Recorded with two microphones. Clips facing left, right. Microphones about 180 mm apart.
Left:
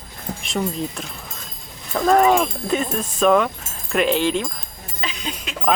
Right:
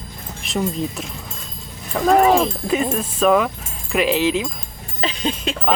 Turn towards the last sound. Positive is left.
turn(degrees=-30)  # may be behind; listen again after turning